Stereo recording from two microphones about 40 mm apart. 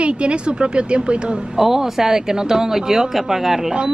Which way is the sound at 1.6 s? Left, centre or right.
Centre.